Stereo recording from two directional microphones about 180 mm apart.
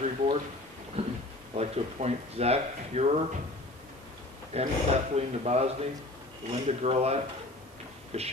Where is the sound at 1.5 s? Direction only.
35° right (ahead or behind).